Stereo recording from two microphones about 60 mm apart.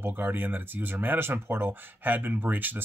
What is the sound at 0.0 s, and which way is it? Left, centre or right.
Speech, right.